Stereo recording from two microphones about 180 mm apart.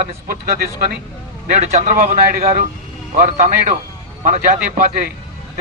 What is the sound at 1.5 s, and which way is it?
Speech, 40° right (ahead or behind).